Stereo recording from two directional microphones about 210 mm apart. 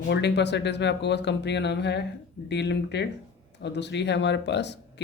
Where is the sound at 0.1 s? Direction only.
55° left (ahead or behind).